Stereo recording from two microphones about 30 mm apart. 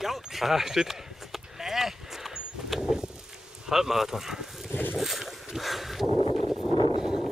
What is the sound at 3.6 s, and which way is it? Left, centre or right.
Speech, centre.